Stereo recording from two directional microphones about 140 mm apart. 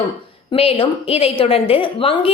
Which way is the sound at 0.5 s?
45° left (ahead or behind).